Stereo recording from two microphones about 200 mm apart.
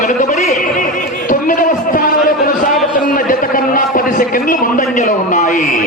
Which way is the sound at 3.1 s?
45° left (ahead or behind).